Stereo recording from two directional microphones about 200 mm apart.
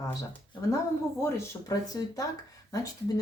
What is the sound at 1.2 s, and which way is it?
Speech, 15° left (ahead or behind).